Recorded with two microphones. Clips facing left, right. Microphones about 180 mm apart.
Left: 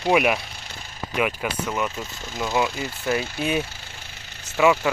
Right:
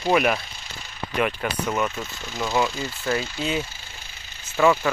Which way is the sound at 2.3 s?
15° left (ahead or behind).